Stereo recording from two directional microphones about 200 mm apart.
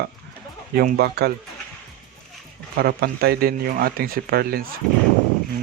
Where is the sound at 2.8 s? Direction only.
50° right (ahead or behind).